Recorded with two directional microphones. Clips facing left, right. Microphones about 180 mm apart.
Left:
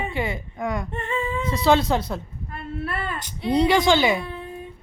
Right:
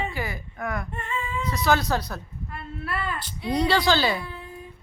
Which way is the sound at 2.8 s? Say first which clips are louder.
Even; 25° left (ahead or behind).